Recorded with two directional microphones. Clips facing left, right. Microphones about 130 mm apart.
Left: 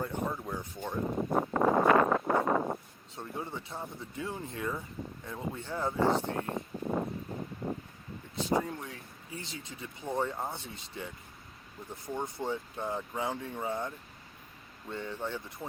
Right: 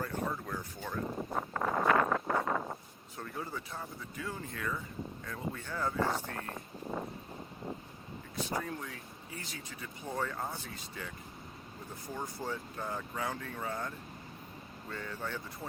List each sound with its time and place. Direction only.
0.0 s a sound: 20° left (ahead or behind)
3.2 s speech: 25° left (ahead or behind)
8.4 s speech: 20° left (ahead or behind)